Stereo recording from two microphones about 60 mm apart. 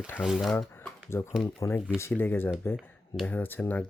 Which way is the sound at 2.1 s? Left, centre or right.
Left.